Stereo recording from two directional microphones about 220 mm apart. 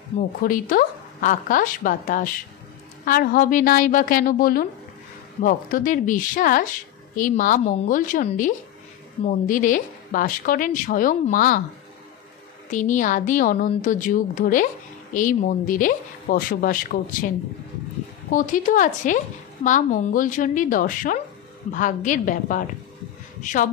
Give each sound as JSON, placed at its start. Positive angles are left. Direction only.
{"t": 0.4, "sound": "a woman's voice", "side_deg": 40}
{"t": 12.7, "sound": "a woman's voice", "side_deg": 35}
{"t": 18.3, "sound": "a woman's voice", "side_deg": 35}